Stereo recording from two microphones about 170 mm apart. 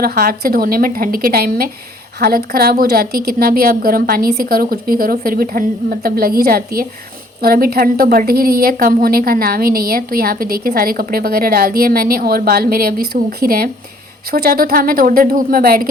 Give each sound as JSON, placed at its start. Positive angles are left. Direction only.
{"t": 0.0, "sound": "a woman's voice", "side_deg": -60}